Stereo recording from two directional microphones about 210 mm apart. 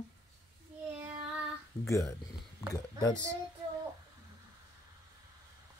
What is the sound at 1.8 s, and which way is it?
Speech, 15° left (ahead or behind).